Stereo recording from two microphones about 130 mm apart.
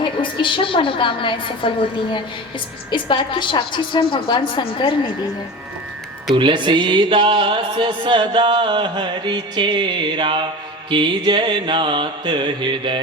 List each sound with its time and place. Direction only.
0.0 s a woman's voice: 40° left (ahead or behind)
2.9 s a woman's voice: 40° left (ahead or behind)
6.3 s speech: 40° right (ahead or behind)